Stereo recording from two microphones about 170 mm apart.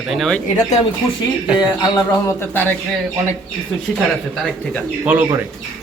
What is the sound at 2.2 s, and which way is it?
Speech, 15° left (ahead or behind).